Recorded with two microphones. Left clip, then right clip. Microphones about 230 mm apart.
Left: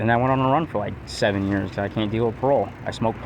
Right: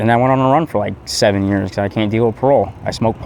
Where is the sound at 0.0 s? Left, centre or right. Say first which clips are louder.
Right 7 dB; right.